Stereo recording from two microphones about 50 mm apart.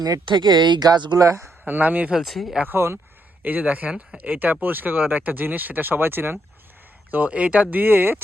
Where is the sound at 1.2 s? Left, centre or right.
Right.